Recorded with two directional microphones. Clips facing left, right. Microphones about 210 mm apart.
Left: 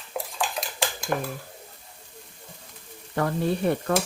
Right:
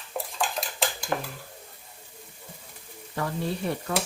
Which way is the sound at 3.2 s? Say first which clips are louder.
Left 5 dB; 60° left (ahead or behind).